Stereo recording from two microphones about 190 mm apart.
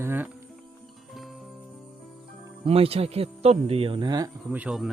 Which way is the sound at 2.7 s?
30° right (ahead or behind).